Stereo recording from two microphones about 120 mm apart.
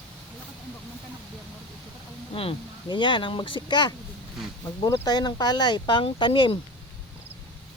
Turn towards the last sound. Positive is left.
turn(degrees=45)  # may be behind; listen again after turning